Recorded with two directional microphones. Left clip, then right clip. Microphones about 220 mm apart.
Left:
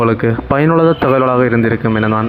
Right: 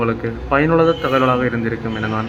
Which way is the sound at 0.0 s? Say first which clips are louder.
Left 7 dB; 30° left (ahead or behind).